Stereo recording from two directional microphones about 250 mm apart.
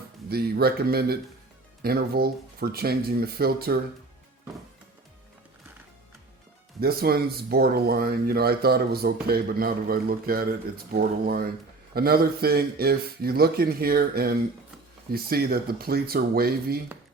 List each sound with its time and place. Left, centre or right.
0.3 s a man's voice: right
6.7 s a man's voice: right